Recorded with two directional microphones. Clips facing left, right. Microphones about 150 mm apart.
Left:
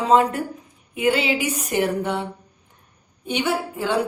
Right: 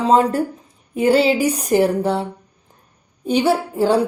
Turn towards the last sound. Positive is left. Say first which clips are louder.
# right 6 dB
turn(degrees=-35)  # may be behind; listen again after turning